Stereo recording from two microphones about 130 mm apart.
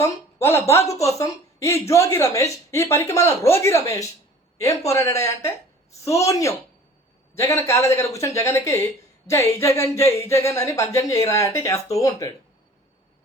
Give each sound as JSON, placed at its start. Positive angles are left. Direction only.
{"t": 0.0, "sound": "speech", "side_deg": 20}